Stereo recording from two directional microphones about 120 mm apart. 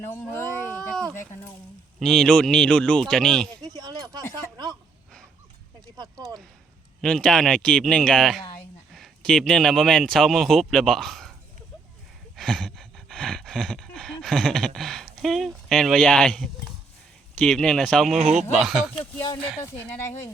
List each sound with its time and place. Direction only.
0.1 s speech: 20° left (ahead or behind)
0.8 s a sound: 5° left (ahead or behind)
2.0 s speech: 5° left (ahead or behind)
3.6 s a sound: 30° right (ahead or behind)
7.0 s a man's voice: 5° left (ahead or behind)
12.4 s a sound: 5° left (ahead or behind)
17.3 s speech: 5° left (ahead or behind)
18.2 s speech: 70° right (ahead or behind)
18.6 s speech: 5° right (ahead or behind)